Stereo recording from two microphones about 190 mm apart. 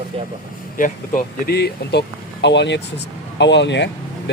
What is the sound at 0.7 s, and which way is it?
Speech, 45° left (ahead or behind).